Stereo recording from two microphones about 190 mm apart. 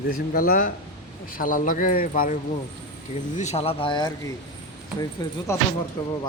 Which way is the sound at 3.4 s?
35° left (ahead or behind).